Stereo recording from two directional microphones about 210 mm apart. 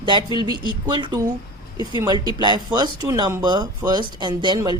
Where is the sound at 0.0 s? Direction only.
25° right (ahead or behind).